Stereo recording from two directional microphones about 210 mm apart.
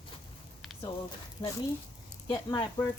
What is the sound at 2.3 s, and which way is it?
Speech, 20° left (ahead or behind).